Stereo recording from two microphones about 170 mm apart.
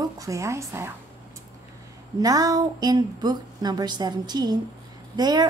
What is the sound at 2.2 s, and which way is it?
A woman's voice, 20° right (ahead or behind).